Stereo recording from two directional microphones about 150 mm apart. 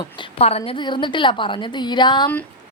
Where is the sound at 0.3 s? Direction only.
40° left (ahead or behind).